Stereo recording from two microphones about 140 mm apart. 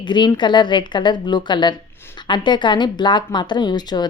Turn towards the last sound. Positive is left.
turn(degrees=30)  # may be behind; listen again after turning